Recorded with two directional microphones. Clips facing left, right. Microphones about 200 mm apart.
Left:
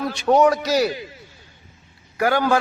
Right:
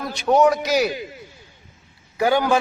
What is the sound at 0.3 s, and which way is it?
Speech, 5° right (ahead or behind).